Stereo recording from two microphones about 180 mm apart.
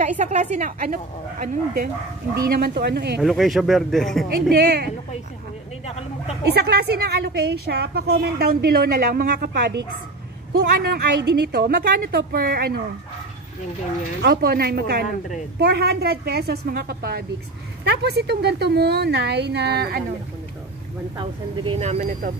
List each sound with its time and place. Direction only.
0.2 s speech: 40° right (ahead or behind)
1.4 s a woman's voice: 55° right (ahead or behind)
3.2 s speech: centre (ahead or behind)
4.5 s a woman's voice: 65° right (ahead or behind)
5.9 s a sound: 35° left (ahead or behind)
6.5 s a woman's voice: 65° right (ahead or behind)
14.2 s a woman's voice: 60° right (ahead or behind)
21.2 s speech: 30° right (ahead or behind); by 22.3 s 45° right (ahead or behind)